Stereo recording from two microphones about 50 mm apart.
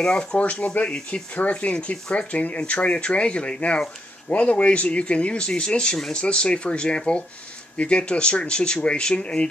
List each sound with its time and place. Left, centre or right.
0.0 s speech: centre